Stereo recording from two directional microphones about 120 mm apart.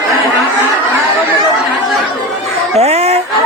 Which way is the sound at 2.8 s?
60° right (ahead or behind).